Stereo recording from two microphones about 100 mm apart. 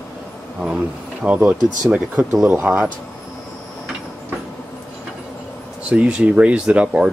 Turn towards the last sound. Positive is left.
turn(degrees=-10)  # may be behind; listen again after turning